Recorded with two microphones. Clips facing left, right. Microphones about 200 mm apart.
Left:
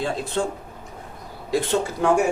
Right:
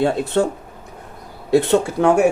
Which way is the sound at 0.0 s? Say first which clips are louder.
Right 7 dB; 65° right (ahead or behind).